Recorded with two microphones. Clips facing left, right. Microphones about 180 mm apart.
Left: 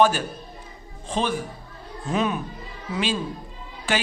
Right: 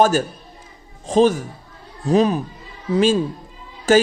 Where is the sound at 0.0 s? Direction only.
45° right (ahead or behind).